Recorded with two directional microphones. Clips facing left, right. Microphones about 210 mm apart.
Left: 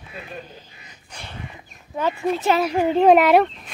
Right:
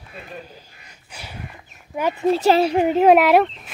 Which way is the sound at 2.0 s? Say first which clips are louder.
Right 1 dB; 15° right (ahead or behind).